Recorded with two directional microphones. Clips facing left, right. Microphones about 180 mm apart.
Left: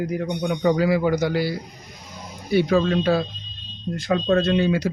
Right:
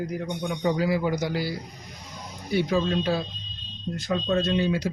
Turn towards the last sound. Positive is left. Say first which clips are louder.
# left 4 dB
turn(degrees=65)  # may be behind; listen again after turning